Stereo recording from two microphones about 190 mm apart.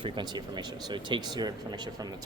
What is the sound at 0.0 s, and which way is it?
Speech, 25° right (ahead or behind).